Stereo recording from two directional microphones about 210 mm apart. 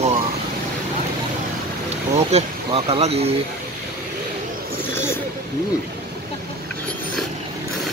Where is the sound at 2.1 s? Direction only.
30° right (ahead or behind).